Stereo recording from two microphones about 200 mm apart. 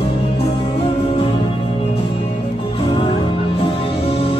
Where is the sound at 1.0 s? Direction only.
30° left (ahead or behind).